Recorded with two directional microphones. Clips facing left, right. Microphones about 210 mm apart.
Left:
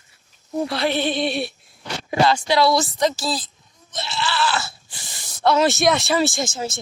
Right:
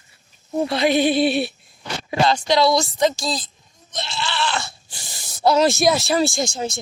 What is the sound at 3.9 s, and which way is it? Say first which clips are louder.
Bleat: left 1 dB; 5° left (ahead or behind).